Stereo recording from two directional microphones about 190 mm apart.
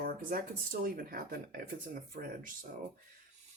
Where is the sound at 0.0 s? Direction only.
50° right (ahead or behind).